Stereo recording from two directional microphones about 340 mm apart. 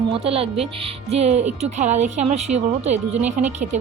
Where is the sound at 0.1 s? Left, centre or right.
Centre.